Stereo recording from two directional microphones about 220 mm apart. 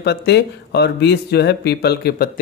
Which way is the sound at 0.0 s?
50° left (ahead or behind).